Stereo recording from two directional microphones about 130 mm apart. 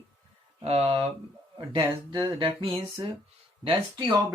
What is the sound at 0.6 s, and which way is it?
Speech, 50° right (ahead or behind).